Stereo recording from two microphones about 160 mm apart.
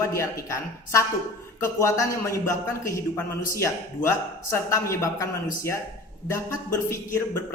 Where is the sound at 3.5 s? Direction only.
20° left (ahead or behind).